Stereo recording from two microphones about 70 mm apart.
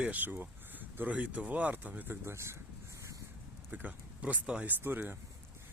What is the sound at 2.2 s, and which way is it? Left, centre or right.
Vehicle, right.